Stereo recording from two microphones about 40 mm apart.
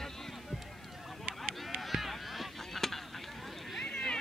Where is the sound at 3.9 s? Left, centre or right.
Centre.